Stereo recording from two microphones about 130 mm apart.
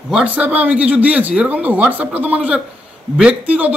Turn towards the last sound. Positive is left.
turn(degrees=-10)  # may be behind; listen again after turning